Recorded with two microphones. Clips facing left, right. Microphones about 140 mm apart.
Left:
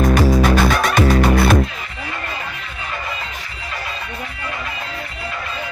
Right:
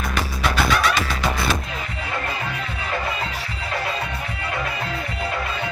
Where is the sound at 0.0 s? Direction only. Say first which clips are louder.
Left 10 dB; 45° left (ahead or behind).